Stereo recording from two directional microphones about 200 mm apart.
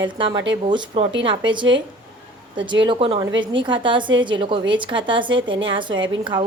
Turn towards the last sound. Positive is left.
turn(degrees=-25)  # may be behind; listen again after turning